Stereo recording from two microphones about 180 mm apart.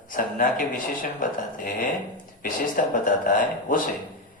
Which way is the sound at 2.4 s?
50° left (ahead or behind).